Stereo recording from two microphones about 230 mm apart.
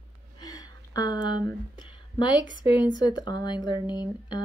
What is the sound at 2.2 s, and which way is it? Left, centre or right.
Speech, centre.